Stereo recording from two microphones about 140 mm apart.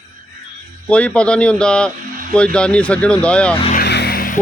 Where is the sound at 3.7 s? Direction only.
85° left.